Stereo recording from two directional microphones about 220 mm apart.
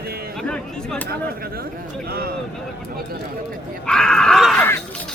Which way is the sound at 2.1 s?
45° right (ahead or behind).